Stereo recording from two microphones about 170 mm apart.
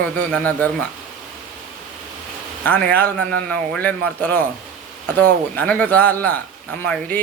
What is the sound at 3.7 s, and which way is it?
Speech, 10° left (ahead or behind).